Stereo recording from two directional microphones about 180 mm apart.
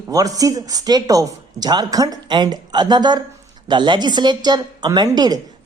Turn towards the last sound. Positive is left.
turn(degrees=-25)  # may be behind; listen again after turning